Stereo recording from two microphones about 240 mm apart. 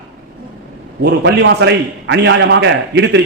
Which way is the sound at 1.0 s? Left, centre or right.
Right.